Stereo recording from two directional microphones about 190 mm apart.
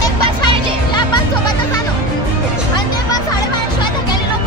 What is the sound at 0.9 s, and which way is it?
Music, 20° left (ahead or behind).